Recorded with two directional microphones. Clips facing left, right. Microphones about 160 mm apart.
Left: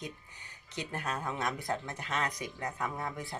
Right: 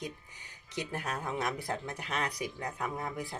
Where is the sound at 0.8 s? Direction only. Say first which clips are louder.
Right 1 dB; 10° right (ahead or behind).